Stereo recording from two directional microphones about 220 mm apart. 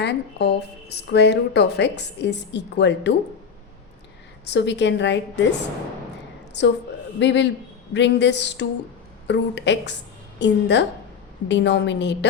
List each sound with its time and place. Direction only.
0.0 s a woman's voice: 50° left (ahead or behind)
4.5 s a woman's voice: 55° left (ahead or behind)
6.5 s a woman's voice: 50° left (ahead or behind)